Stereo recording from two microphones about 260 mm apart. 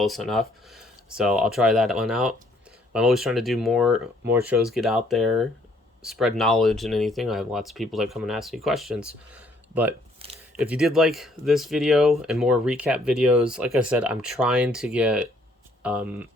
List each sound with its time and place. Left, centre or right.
0.0 s speech: centre